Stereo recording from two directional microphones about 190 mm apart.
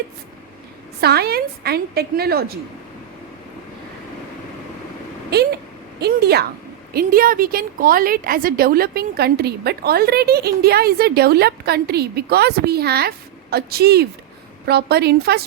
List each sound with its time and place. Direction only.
1.0 s a woman's voice: 55° right (ahead or behind)
6.0 s a woman's voice: 55° right (ahead or behind)